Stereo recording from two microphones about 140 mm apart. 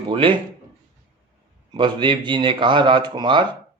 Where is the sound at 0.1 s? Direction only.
40° right (ahead or behind).